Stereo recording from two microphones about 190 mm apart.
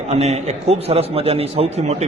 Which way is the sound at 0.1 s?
35° right (ahead or behind).